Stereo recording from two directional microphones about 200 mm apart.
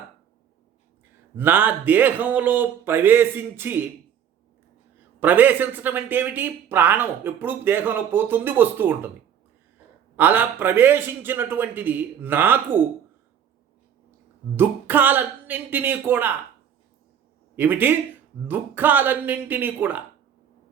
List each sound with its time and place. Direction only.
1.4 s speech: 10° right (ahead or behind)
5.2 s speech: 10° right (ahead or behind)
10.2 s speech: 10° right (ahead or behind)
14.5 s speech: 10° right (ahead or behind)
17.6 s speech: 10° right (ahead or behind)